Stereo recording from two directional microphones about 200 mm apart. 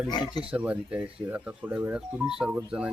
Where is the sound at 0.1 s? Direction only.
20° left (ahead or behind).